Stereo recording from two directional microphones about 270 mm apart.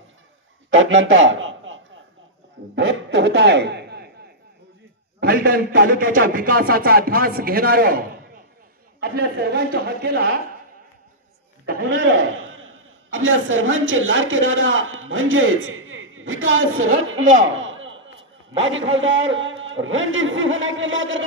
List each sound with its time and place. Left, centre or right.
0.7 s a man's voice: right
5.2 s speech: right
11.6 s a sound: right
11.9 s a man's voice: right
17.6 s a sound: right
18.9 s a man's voice: right